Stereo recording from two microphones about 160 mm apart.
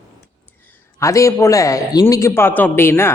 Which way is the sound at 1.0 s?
20° left (ahead or behind).